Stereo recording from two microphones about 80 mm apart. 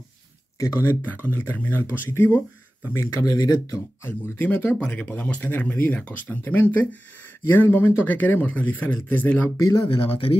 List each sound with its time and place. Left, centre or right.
0.6 s speech: left
3.3 s speech: left
4.0 s speech: left
9.8 s speech: left